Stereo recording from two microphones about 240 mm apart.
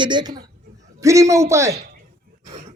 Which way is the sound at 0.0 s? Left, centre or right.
Centre.